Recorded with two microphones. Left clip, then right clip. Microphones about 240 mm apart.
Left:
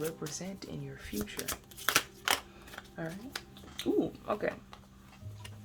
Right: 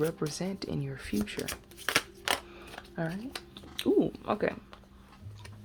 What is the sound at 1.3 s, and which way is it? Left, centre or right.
Shuffling cards, centre.